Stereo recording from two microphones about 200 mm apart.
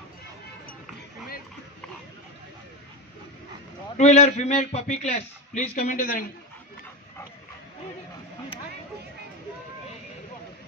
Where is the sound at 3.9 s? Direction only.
35° left (ahead or behind).